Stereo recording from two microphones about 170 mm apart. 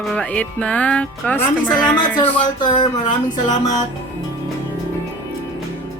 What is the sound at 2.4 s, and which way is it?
Music, 25° left (ahead or behind).